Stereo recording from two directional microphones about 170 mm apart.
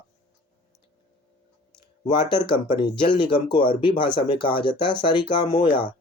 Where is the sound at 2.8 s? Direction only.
30° left (ahead or behind).